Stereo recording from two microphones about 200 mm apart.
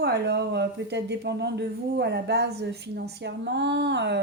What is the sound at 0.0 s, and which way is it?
A woman's voice, 55° right (ahead or behind).